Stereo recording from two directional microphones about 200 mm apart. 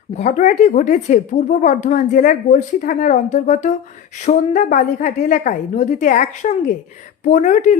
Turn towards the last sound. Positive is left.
turn(degrees=40)  # may be behind; listen again after turning